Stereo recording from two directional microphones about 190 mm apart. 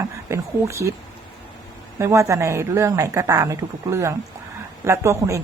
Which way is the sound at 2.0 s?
15° right (ahead or behind).